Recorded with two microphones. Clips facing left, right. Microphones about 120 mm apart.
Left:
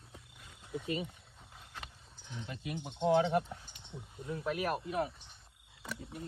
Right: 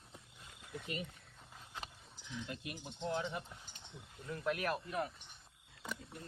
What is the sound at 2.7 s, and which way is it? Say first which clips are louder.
Speech: left 12 dB; 90° left.